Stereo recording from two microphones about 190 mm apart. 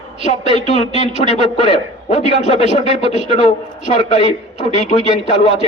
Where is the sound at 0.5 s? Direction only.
35° left (ahead or behind).